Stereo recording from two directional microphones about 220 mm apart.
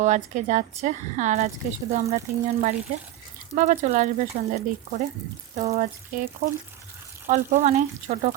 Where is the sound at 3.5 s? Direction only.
30° right (ahead or behind).